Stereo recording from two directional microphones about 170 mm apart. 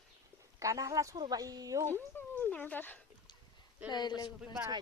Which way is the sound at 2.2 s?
10° left (ahead or behind).